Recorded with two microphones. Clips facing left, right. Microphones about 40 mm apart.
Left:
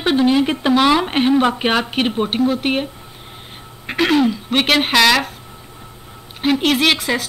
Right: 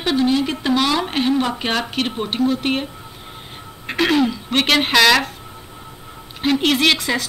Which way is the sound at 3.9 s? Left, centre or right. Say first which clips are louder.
Left 2 dB; centre.